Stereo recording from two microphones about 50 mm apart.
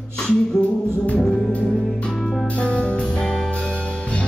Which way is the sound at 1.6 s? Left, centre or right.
Centre.